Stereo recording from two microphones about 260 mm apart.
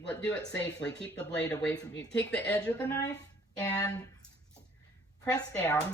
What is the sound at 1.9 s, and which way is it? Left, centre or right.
Speech, left.